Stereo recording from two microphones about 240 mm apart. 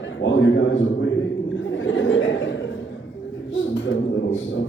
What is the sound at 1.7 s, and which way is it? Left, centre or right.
Chuckle, left.